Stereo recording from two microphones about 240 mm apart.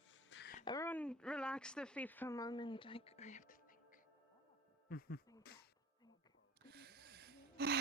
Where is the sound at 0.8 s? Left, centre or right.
Centre; by 3.6 s left.